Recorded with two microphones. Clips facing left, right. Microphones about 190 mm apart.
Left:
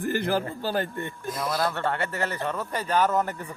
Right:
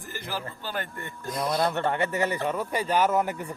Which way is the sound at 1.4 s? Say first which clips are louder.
Right 2 dB; 20° right (ahead or behind).